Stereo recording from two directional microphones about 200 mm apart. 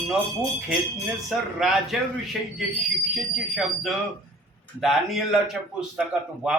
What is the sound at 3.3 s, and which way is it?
A man's voice, centre (ahead or behind).